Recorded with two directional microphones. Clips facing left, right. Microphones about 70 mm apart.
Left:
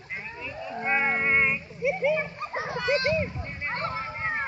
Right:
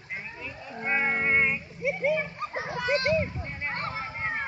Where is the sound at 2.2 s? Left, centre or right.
Centre.